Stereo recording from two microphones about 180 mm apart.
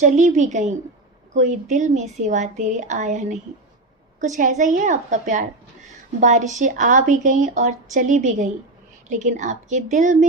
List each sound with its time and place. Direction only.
0.0 s a woman's voice: 40° right (ahead or behind)